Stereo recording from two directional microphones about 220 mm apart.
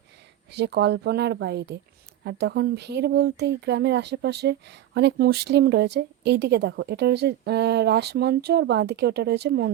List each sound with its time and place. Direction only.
0.5 s speech: 50° right (ahead or behind)